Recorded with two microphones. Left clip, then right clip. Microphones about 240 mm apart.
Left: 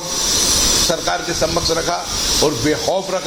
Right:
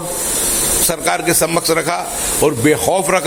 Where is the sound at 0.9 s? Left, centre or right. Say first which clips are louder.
Right 3 dB; right.